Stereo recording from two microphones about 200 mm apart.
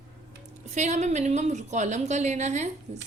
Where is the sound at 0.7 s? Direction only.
35° right (ahead or behind).